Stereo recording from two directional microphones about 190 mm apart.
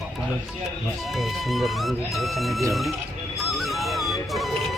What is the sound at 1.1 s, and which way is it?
Speech, centre (ahead or behind).